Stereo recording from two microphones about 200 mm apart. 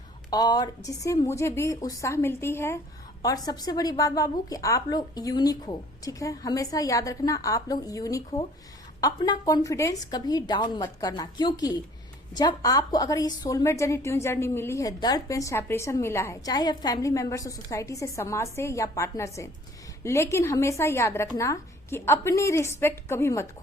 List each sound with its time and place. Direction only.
0.3 s a woman's voice: 20° left (ahead or behind)